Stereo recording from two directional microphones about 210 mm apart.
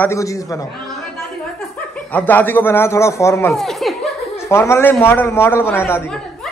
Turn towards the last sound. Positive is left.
turn(degrees=10)  # may be behind; listen again after turning